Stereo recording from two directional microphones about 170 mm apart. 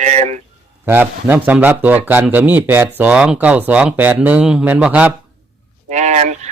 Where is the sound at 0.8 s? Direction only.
15° right (ahead or behind).